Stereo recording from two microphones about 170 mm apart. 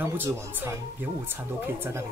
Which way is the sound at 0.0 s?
15° right (ahead or behind).